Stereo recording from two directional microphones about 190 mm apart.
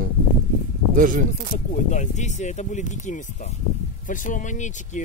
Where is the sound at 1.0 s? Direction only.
45° right (ahead or behind).